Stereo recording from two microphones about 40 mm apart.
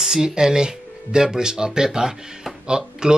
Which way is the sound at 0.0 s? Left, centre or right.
Centre.